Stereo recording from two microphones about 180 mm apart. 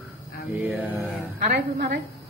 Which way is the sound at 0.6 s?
5° right (ahead or behind).